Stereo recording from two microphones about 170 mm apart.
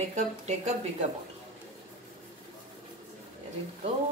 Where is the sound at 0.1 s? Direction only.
45° right (ahead or behind).